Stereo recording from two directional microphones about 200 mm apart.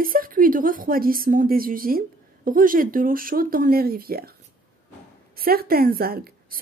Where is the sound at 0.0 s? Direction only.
45° right (ahead or behind).